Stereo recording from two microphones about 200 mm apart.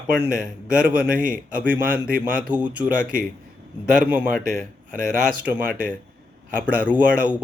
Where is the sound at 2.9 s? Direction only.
45° right (ahead or behind).